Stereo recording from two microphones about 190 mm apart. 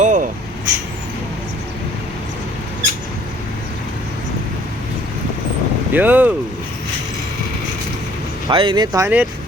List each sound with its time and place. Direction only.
0.0 s vehicle: 40° right (ahead or behind)
5.9 s speech: 10° right (ahead or behind)
8.4 s speech: 25° right (ahead or behind)